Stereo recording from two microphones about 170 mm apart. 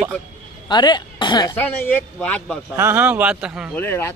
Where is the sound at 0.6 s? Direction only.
25° left (ahead or behind).